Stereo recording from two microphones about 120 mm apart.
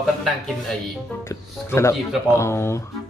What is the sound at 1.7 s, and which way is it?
Speech, 25° left (ahead or behind).